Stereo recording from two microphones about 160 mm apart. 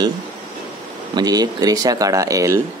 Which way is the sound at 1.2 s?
25° right (ahead or behind).